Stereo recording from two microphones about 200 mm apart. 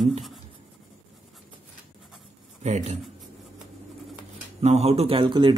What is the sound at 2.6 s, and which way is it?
Speech, 35° right (ahead or behind).